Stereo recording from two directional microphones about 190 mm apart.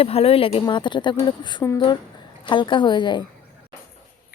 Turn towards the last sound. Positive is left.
turn(degrees=25)  # may be behind; listen again after turning